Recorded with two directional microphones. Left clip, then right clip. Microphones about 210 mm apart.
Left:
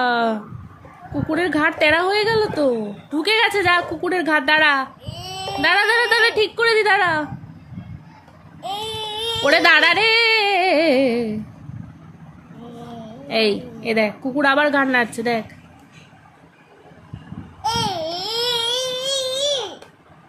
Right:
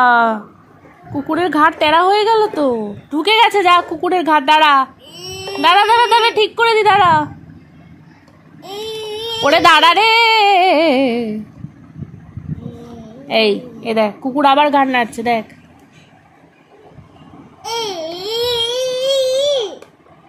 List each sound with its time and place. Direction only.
0.0 s speech: centre (ahead or behind)
5.0 s babbling: 30° left (ahead or behind)
5.6 s speech: 10° right (ahead or behind)
8.5 s child singing: 30° left (ahead or behind)
9.6 s speech: 10° right (ahead or behind)
13.3 s a woman's voice: 5° right (ahead or behind)
18.2 s baby cry: 15° left (ahead or behind)